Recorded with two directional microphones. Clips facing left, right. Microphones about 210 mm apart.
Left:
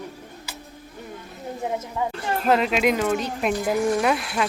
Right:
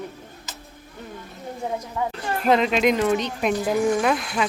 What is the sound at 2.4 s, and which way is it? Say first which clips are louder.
Speech: right 2 dB; 5° left (ahead or behind).